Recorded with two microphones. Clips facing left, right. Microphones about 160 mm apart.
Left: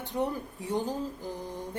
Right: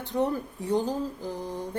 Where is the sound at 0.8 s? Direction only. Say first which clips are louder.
Right 1 dB; 15° right (ahead or behind).